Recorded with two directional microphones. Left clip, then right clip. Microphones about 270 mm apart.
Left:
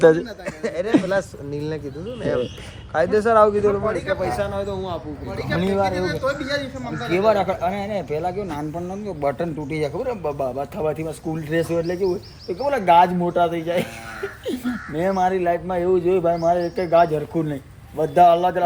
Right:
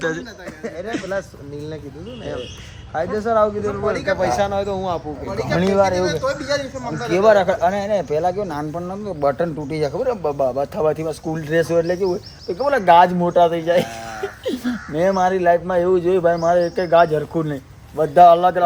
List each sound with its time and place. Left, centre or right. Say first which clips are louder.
0.0 s speech: left 10 dB; centre
0.6 s speech: left 4 dB; left
2.9 s speech: left 3 dB; left
4.2 s speech: right 5 dB; right
6.9 s speech: right 4 dB; centre